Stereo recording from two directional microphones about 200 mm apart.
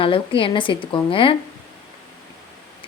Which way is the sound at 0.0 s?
25° left (ahead or behind).